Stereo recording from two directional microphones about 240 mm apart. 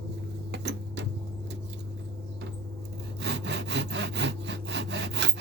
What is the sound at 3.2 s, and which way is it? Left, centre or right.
Sawing, right.